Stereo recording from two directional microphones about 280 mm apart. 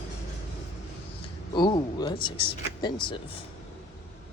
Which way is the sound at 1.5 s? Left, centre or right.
Centre.